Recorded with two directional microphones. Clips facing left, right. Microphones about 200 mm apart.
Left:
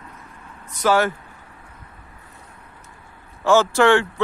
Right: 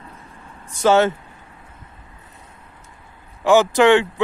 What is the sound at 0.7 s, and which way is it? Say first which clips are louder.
Speech: right 3 dB; 25° right (ahead or behind).